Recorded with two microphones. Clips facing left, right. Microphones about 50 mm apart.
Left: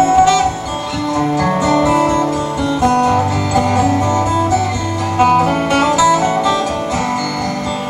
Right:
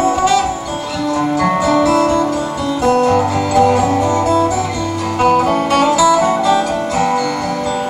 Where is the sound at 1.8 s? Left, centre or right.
Centre.